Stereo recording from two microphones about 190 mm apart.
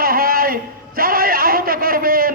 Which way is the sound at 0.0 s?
50° right (ahead or behind).